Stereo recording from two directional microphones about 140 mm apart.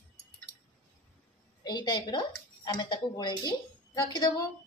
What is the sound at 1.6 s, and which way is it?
Speech, 30° left (ahead or behind).